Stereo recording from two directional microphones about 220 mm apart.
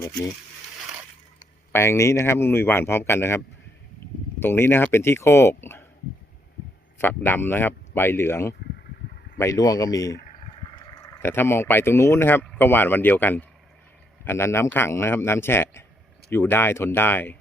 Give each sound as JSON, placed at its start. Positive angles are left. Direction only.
{"t": 1.7, "sound": "speech", "side_deg": 10}
{"t": 7.0, "sound": "speech", "side_deg": 10}